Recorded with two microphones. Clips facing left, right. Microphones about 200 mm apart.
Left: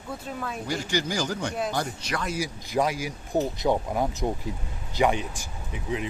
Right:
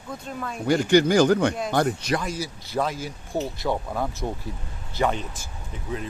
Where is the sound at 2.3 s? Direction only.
15° left (ahead or behind).